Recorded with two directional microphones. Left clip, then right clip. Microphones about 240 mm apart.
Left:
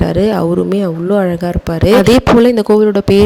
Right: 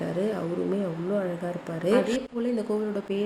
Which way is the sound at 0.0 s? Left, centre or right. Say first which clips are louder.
Left 15 dB; left.